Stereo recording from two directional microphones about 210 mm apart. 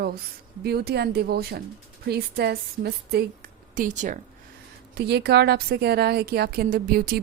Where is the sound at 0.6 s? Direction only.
50° right (ahead or behind).